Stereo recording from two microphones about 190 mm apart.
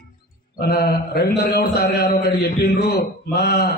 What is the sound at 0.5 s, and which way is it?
Speech, 55° left (ahead or behind).